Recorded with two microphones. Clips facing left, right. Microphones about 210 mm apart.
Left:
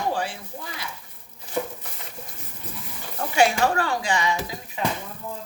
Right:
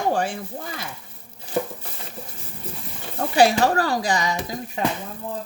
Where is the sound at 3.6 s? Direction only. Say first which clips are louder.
Right 3 dB; 40° right (ahead or behind).